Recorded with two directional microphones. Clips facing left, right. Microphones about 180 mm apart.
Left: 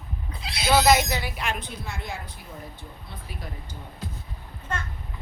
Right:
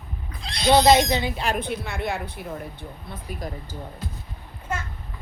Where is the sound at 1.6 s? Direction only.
60° right (ahead or behind).